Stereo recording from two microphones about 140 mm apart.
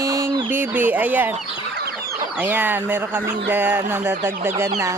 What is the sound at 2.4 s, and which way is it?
Speech, 15° right (ahead or behind).